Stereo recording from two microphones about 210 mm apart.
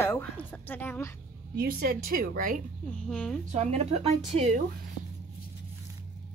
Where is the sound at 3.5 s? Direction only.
30° right (ahead or behind).